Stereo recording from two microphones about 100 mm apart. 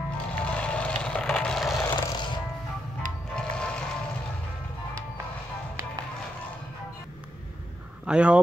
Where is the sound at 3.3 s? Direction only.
10° left (ahead or behind).